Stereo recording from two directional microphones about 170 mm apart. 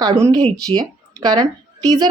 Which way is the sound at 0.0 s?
25° right (ahead or behind).